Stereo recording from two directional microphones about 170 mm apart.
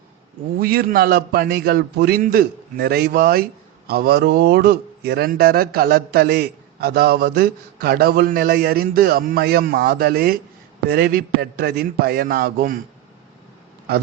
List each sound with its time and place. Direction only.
0.6 s speech: 60° right (ahead or behind)